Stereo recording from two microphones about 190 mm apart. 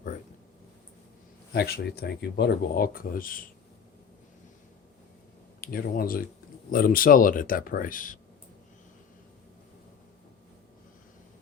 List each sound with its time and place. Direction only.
1.5 s speech: 55° left (ahead or behind)
5.5 s speech: 50° left (ahead or behind)